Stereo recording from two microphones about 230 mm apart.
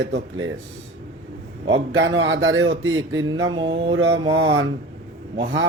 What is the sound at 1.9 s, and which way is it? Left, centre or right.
Speech, right.